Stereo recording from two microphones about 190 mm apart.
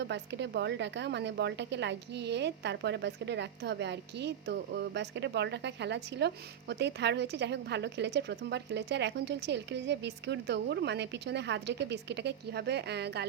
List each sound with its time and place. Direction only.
0.0 s a woman's voice: 65° right (ahead or behind)